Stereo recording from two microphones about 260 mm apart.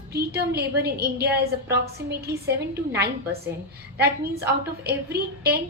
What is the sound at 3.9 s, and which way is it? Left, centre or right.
A woman's voice, right.